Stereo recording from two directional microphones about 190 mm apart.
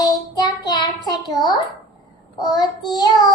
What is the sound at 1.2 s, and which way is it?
Speech, centre (ahead or behind).